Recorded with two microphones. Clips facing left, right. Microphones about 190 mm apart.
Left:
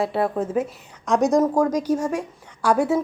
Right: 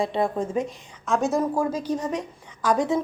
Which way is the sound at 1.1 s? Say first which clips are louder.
Left 5 dB; 15° left (ahead or behind).